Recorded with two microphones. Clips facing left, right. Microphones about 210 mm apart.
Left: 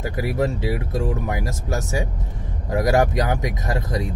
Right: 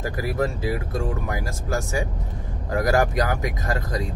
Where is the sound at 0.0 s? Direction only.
20° left (ahead or behind).